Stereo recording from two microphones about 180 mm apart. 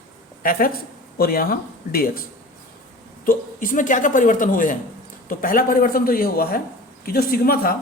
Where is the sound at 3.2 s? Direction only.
50° left (ahead or behind).